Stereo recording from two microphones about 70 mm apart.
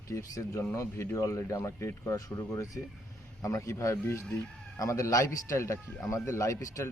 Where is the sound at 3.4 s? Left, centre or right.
Left.